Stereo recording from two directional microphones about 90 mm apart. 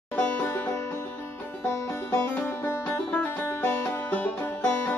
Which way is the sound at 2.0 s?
20° left (ahead or behind).